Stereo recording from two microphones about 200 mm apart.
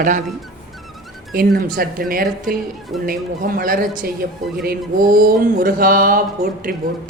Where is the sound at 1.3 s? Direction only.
50° right (ahead or behind).